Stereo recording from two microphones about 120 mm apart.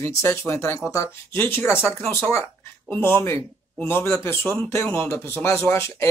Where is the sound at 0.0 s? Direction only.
25° left (ahead or behind).